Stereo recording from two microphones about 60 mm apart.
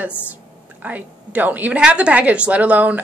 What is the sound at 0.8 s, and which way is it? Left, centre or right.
A woman's voice, right.